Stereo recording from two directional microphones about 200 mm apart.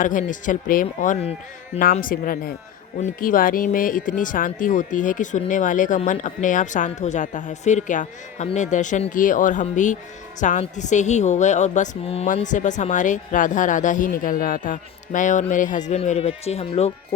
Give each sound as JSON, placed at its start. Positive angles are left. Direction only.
{"t": 0.0, "sound": "speech", "side_deg": 40}